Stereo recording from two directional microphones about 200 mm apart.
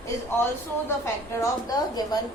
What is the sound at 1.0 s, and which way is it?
A woman's voice, 15° left (ahead or behind).